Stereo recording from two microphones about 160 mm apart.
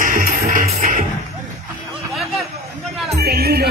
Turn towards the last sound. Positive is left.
turn(degrees=-80)